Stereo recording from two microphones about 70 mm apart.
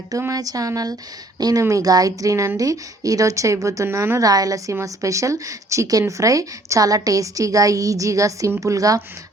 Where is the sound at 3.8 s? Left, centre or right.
Right.